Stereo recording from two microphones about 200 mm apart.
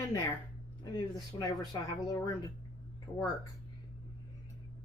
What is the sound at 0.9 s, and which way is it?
Speech, 20° left (ahead or behind).